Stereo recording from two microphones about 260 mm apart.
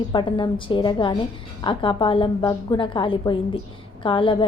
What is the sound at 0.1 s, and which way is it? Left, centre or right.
A woman's voice, centre.